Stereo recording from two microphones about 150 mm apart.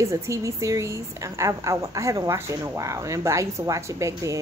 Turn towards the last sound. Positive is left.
turn(degrees=-20)  # may be behind; listen again after turning